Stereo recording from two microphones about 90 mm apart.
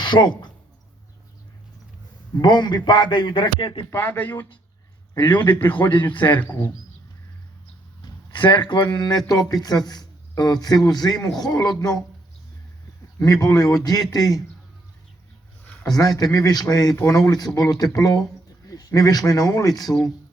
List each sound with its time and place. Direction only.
0.0 s a sound: 60° left (ahead or behind)
2.4 s a man's voice: 60° left (ahead or behind)
3.9 s speech: 25° left (ahead or behind)
5.1 s a man's voice: 55° left (ahead or behind)
8.0 s a man's voice: 60° left (ahead or behind)
13.2 s a man's voice: 45° left (ahead or behind)
15.9 s a man's voice: 45° left (ahead or behind)